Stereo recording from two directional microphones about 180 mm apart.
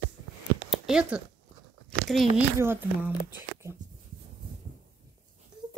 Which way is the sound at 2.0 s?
Centre (ahead or behind).